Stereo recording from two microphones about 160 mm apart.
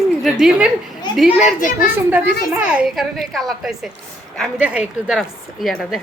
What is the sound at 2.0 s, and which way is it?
A woman's voice, 10° right (ahead or behind).